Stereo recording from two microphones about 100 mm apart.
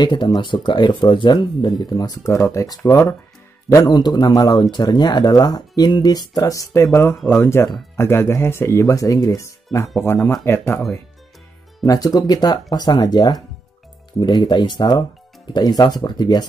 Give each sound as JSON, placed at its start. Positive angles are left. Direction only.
{"t": 0.0, "sound": "speech", "side_deg": 50}
{"t": 2.3, "sound": "speech", "side_deg": 30}
{"t": 11.8, "sound": "speech", "side_deg": 40}